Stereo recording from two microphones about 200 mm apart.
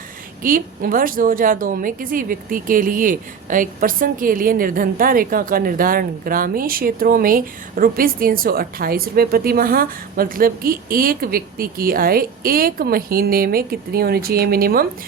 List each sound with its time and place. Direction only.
0.4 s a woman's voice: 45° right (ahead or behind)